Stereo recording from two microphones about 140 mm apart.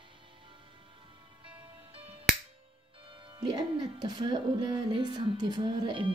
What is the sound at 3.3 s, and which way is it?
Music, 35° right (ahead or behind).